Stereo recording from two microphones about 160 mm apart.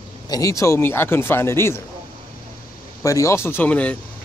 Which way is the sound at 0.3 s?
20° left (ahead or behind).